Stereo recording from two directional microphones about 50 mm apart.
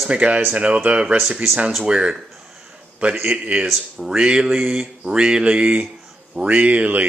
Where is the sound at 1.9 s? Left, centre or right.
Right.